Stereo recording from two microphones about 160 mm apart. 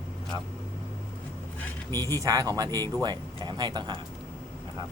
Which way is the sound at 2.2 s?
20° right (ahead or behind).